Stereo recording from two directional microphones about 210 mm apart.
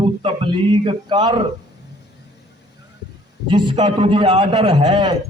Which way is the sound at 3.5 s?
20° right (ahead or behind).